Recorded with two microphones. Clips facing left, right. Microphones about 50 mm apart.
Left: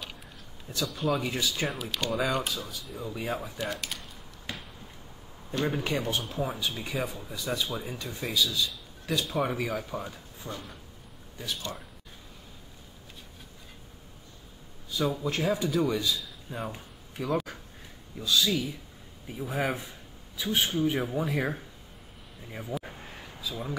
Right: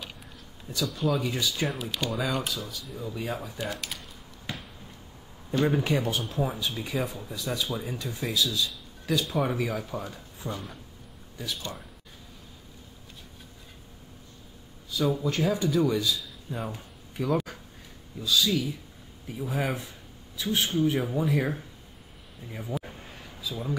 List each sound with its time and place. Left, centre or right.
0.7 s speech: centre
3.5 s speech: centre
4.5 s finger snapping: centre
5.5 s speech: centre
15.2 s speech: centre
17.2 s a sound: centre
18.2 s speech: centre
22.7 s speech: centre
23.4 s speech: centre